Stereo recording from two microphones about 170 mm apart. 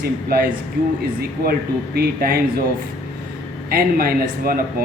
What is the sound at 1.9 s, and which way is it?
Speech, 65° right (ahead or behind).